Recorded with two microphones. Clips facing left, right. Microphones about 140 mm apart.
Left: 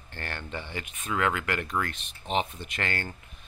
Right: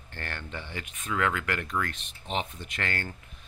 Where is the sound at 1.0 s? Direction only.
15° left (ahead or behind).